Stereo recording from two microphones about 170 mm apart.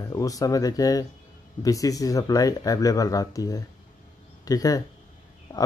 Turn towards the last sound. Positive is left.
turn(degrees=15)  # may be behind; listen again after turning